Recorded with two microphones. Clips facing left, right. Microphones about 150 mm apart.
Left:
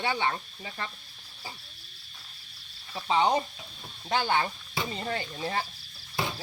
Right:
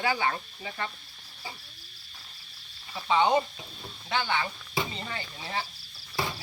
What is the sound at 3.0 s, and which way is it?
Speech, 30° left (ahead or behind).